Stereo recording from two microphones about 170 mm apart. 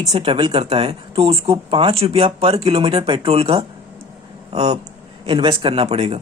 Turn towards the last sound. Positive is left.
turn(degrees=-35)  # may be behind; listen again after turning